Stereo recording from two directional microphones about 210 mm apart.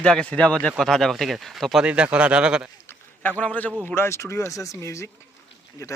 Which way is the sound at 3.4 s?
5° left (ahead or behind).